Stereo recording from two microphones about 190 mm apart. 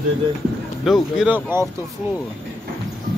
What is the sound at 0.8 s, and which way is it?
Speech, centre (ahead or behind).